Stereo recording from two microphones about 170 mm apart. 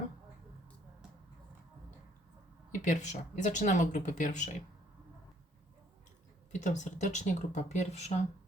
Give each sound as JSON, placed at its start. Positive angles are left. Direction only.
{"t": 2.8, "sound": "speech", "side_deg": 45}
{"t": 6.5, "sound": "speech", "side_deg": 45}